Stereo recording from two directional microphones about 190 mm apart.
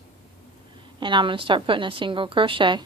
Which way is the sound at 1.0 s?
25° right (ahead or behind).